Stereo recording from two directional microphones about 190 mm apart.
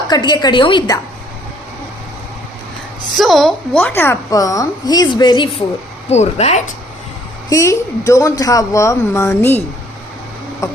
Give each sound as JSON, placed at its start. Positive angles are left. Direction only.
{"t": 0.1, "sound": "a woman's voice", "side_deg": 20}
{"t": 3.2, "sound": "a woman's voice", "side_deg": 0}
{"t": 6.1, "sound": "speech", "side_deg": 35}
{"t": 7.5, "sound": "a woman's voice", "side_deg": 15}
{"t": 10.6, "sound": "a woman's voice", "side_deg": 15}